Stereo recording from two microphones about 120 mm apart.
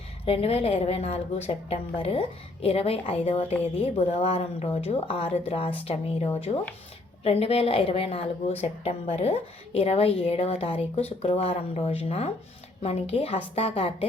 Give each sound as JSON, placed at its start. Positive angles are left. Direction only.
{"t": 0.3, "sound": "speech", "side_deg": 55}
{"t": 7.3, "sound": "speech", "side_deg": 55}